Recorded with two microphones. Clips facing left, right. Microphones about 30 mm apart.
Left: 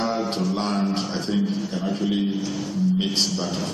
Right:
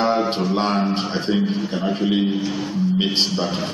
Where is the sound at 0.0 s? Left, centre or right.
Right.